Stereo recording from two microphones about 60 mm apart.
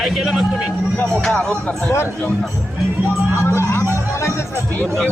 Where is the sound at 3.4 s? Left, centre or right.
Left.